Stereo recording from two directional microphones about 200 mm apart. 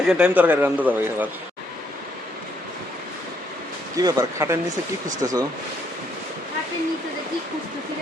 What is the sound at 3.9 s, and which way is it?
Speech, 15° right (ahead or behind).